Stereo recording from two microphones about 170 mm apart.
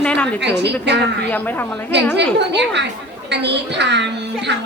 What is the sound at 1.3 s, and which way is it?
Speech, 10° left (ahead or behind).